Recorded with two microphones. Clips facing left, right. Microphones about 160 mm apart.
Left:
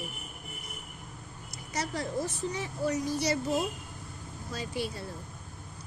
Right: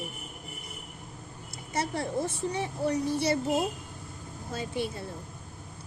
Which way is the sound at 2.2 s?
55° right (ahead or behind).